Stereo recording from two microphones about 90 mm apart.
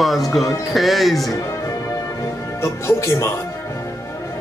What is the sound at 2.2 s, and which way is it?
A man's voice, 35° left (ahead or behind).